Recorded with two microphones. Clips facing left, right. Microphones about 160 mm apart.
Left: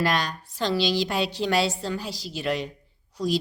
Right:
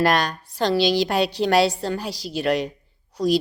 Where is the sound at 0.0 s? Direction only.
65° right (ahead or behind).